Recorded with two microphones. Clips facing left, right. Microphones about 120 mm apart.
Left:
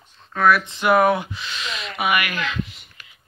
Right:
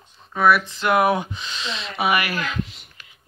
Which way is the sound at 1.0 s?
15° right (ahead or behind).